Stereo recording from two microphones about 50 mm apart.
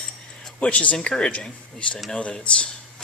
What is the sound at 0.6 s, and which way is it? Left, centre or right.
Speech, left.